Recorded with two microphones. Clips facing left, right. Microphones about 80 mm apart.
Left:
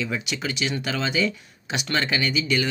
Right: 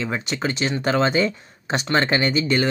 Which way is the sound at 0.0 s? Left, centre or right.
Right.